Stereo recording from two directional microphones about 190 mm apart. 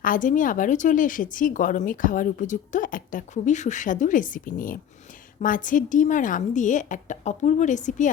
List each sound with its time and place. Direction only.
0.0 s a woman's voice: 45° left (ahead or behind)